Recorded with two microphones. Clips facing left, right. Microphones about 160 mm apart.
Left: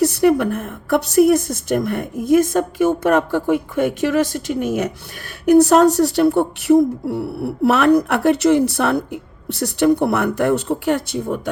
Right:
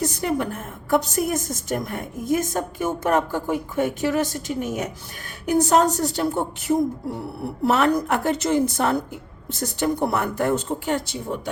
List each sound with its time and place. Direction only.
0.0 s a woman's voice: 70° left (ahead or behind)
5.5 s a woman's voice: 70° left (ahead or behind)